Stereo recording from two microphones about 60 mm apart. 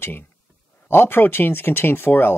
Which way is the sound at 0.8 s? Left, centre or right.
Left.